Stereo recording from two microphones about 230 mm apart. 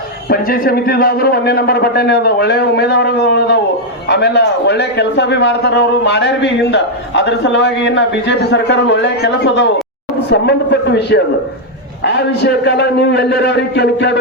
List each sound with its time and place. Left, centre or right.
0.3 s a man's voice: left